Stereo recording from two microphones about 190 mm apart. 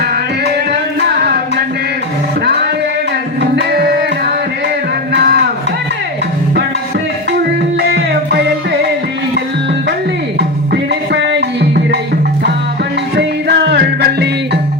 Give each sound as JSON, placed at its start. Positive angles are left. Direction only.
{"t": 1.0, "sound": "a sound", "side_deg": -60}
{"t": 3.5, "sound": "music", "side_deg": -60}
{"t": 5.1, "sound": "a sound", "side_deg": -60}
{"t": 7.8, "sound": "music", "side_deg": -55}
{"t": 11.1, "sound": "music", "side_deg": -65}
{"t": 13.1, "sound": "music", "side_deg": -60}